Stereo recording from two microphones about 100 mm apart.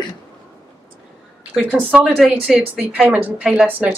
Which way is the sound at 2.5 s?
15° right (ahead or behind).